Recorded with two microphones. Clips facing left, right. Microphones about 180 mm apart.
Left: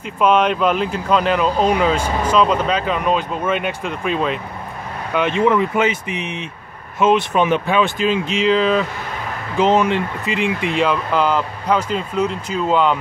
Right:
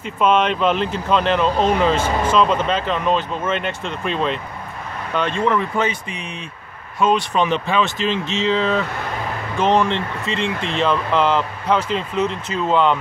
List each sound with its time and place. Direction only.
0.0 s speech: 5° left (ahead or behind)
5.1 s speech: 15° left (ahead or behind)